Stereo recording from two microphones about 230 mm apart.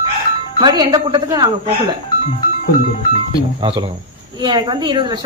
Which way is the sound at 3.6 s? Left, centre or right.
Right.